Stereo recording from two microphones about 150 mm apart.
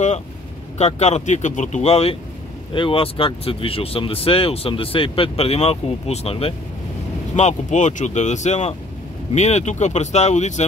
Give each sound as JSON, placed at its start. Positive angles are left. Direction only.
{"t": 0.7, "sound": "speech", "side_deg": 50}
{"t": 7.3, "sound": "speech", "side_deg": 50}